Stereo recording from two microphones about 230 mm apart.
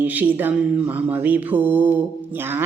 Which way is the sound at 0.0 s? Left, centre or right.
Centre.